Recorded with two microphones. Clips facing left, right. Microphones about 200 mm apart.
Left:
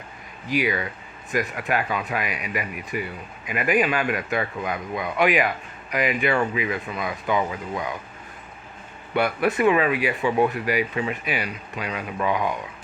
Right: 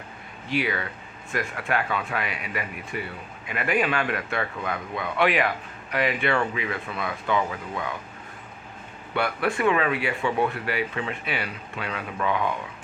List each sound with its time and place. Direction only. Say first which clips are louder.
0.6 s speech: left 3 dB; 15° left (ahead or behind)
9.1 s speech: left 4 dB; 20° left (ahead or behind)